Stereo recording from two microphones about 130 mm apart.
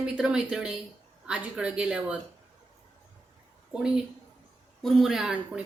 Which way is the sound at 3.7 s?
5° right (ahead or behind).